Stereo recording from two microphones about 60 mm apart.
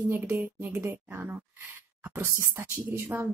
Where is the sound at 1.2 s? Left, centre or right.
Right.